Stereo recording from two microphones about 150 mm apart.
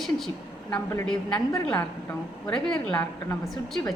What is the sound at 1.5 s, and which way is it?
A woman's voice, 15° left (ahead or behind).